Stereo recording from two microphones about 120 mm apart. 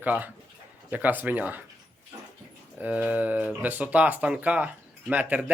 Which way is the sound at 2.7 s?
10° right (ahead or behind).